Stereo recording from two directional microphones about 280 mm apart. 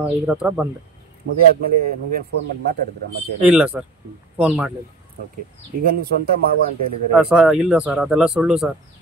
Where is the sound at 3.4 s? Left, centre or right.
Centre.